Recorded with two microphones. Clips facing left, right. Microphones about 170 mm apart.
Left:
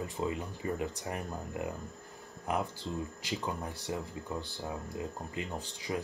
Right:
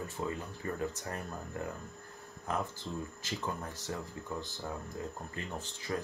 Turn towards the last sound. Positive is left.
turn(degrees=15)  # may be behind; listen again after turning